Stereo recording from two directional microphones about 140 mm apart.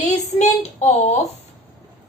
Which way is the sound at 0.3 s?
55° left (ahead or behind).